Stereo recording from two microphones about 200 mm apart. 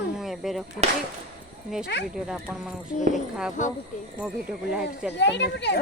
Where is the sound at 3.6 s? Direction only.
40° left (ahead or behind).